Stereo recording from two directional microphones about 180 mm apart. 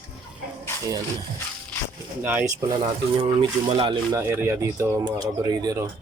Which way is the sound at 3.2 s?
35° right (ahead or behind).